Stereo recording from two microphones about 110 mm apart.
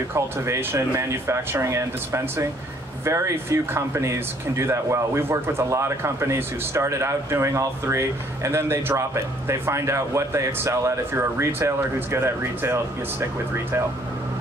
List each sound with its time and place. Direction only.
0.1 s a man's voice: 25° right (ahead or behind)